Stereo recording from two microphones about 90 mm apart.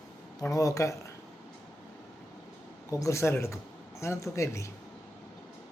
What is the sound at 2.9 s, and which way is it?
Speech, 35° left (ahead or behind).